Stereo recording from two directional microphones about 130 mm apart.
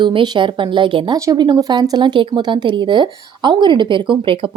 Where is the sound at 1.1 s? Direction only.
30° right (ahead or behind).